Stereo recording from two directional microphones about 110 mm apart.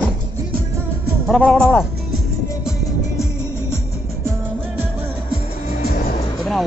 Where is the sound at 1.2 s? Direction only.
10° left (ahead or behind).